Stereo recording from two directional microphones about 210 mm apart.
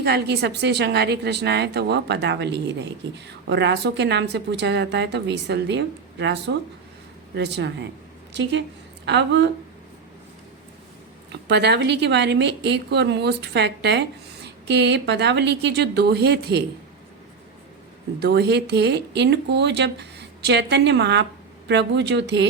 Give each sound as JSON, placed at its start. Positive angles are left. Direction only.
{"t": 0.0, "sound": "a woman's voice", "side_deg": -50}
{"t": 11.3, "sound": "speech", "side_deg": -55}
{"t": 18.2, "sound": "a woman's voice", "side_deg": -50}